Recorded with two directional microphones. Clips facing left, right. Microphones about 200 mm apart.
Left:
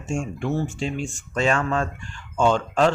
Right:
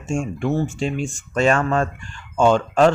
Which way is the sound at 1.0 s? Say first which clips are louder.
Right 5 dB; 45° right (ahead or behind).